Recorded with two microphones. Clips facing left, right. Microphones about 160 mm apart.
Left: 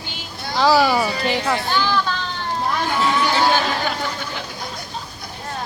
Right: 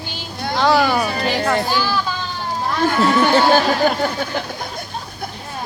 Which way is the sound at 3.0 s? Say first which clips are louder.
Right 4 dB; 45° right (ahead or behind).